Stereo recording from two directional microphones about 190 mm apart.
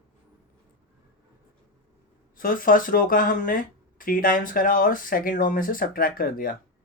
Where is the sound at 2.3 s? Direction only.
45° left (ahead or behind).